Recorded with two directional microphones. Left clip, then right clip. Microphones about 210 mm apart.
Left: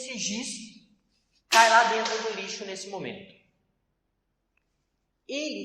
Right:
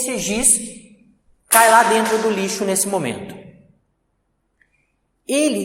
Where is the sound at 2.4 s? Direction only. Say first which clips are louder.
Right 15 dB; 50° right (ahead or behind).